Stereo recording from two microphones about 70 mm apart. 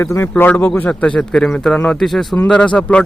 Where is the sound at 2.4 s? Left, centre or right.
Centre.